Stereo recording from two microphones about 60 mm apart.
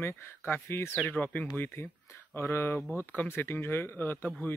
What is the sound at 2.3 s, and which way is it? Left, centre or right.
Speech, left.